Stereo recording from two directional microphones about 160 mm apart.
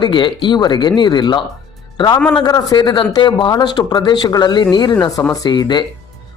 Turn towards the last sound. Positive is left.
turn(degrees=30)  # may be behind; listen again after turning